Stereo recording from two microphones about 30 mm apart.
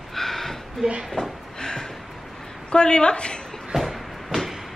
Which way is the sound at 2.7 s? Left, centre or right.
Left.